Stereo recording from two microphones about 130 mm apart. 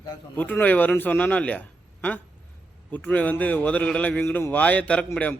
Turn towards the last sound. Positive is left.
turn(degrees=10)  # may be behind; listen again after turning